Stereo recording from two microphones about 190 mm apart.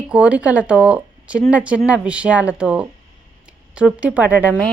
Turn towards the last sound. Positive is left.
turn(degrees=-10)  # may be behind; listen again after turning